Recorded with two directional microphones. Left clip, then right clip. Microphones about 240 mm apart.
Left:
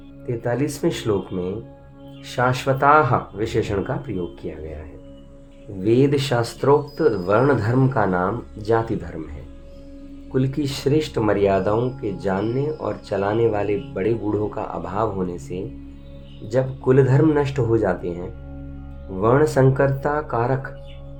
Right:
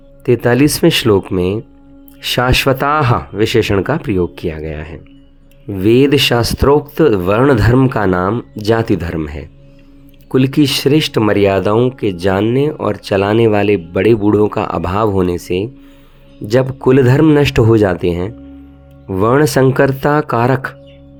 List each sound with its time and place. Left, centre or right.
0.3 s speech: right
5.8 s speech: right